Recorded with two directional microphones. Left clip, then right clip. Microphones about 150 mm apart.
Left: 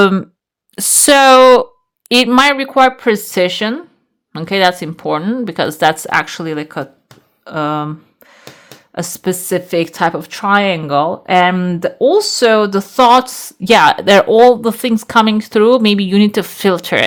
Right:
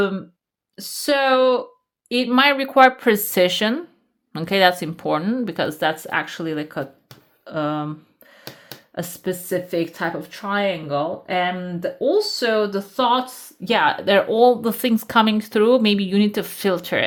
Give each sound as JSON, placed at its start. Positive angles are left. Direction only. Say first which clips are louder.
{"t": 0.0, "sound": "speech", "louder": "left 11 dB", "side_deg": 65}
{"t": 2.3, "sound": "a woman's voice", "louder": "left 1 dB", "side_deg": 25}
{"t": 7.4, "sound": "a sound", "louder": "left 7 dB", "side_deg": 30}
{"t": 9.0, "sound": "speech", "louder": "left 7 dB", "side_deg": 30}
{"t": 9.2, "sound": "speech", "louder": "left 7 dB", "side_deg": 50}
{"t": 13.7, "sound": "speech", "louder": "left 9 dB", "side_deg": 45}